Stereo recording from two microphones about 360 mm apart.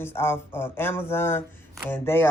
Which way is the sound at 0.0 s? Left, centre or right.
Centre.